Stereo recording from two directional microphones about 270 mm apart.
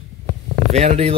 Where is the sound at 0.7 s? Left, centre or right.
Right.